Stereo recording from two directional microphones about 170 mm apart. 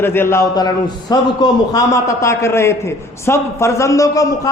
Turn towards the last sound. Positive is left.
turn(degrees=20)  # may be behind; listen again after turning